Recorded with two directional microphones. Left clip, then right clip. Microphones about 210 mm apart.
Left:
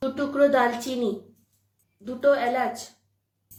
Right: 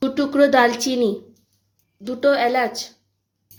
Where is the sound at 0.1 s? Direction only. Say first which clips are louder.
Right 4 dB; 45° right (ahead or behind).